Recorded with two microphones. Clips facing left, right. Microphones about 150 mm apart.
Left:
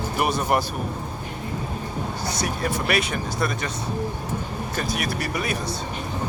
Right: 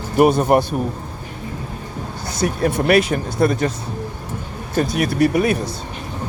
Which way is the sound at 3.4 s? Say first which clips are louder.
Right 11 dB; 30° right (ahead or behind).